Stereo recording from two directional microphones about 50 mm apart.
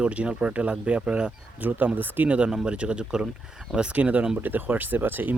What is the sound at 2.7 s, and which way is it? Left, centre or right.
Speech, right.